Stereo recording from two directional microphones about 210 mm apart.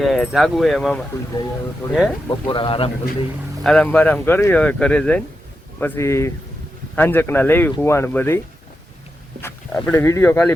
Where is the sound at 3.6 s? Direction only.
5° left (ahead or behind).